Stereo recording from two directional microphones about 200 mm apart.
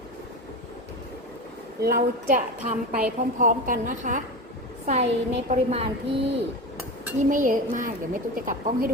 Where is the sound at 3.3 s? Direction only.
40° right (ahead or behind).